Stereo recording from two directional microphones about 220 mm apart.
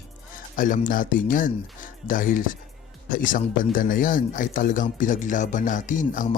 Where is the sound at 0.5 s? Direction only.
40° left (ahead or behind).